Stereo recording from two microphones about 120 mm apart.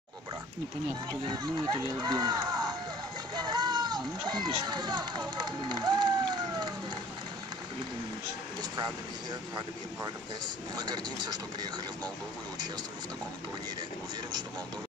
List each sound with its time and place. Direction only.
1.2 s speech: 40° right (ahead or behind)
10.8 s speech: 35° right (ahead or behind)